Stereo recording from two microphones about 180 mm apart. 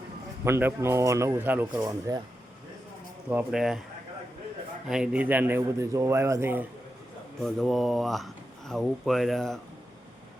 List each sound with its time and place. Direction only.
0.4 s a man's voice: 15° right (ahead or behind)
1.8 s speech: 20° right (ahead or behind)
3.2 s speech: 5° right (ahead or behind)
4.9 s a man's voice: 5° right (ahead or behind)
7.4 s speech: centre (ahead or behind)